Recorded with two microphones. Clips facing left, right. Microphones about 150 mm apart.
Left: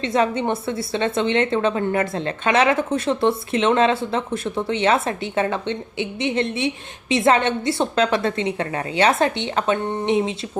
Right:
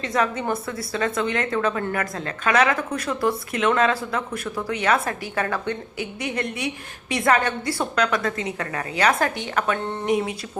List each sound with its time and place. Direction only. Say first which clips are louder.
0.0 s a woman's voice: left 4 dB; 25° left (ahead or behind)